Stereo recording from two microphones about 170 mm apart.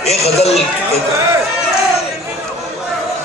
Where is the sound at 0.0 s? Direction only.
40° left (ahead or behind).